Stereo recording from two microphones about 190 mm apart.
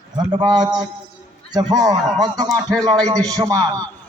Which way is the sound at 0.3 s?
25° right (ahead or behind).